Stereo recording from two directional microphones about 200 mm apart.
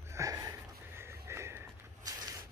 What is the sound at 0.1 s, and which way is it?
Sniff, 15° right (ahead or behind).